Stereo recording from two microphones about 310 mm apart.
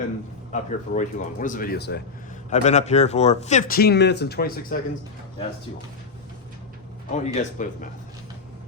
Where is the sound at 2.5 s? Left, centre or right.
Left.